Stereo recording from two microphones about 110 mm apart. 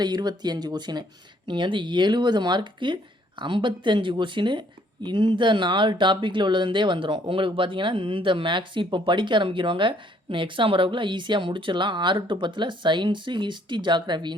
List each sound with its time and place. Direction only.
0.0 s speech: 40° right (ahead or behind)